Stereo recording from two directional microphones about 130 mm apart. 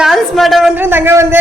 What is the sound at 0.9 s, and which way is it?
Speech, 15° right (ahead or behind).